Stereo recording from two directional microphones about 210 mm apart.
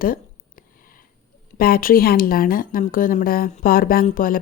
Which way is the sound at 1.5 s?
45° left (ahead or behind).